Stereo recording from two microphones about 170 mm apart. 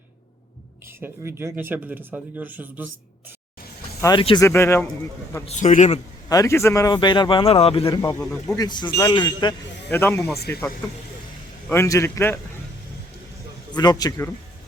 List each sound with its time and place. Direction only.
0.9 s speech: 15° right (ahead or behind)
4.0 s speech: 30° left (ahead or behind)
4.4 s a man's voice: 15° left (ahead or behind)
5.5 s a man's voice: 45° left (ahead or behind)
6.2 s speech: 20° left (ahead or behind); by 7.9 s 35° left (ahead or behind)
7.9 s a man's voice: 15° left (ahead or behind)
8.2 s speech: 5° left (ahead or behind)
8.5 s speech: 25° left (ahead or behind)
9.9 s a man's voice: 10° left (ahead or behind)
11.7 s a man's voice: 15° left (ahead or behind)
13.7 s speech: 25° left (ahead or behind)